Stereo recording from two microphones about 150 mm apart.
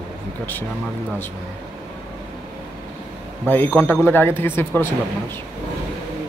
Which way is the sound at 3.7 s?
15° left (ahead or behind).